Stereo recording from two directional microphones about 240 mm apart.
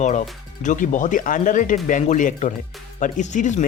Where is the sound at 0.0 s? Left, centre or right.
Left.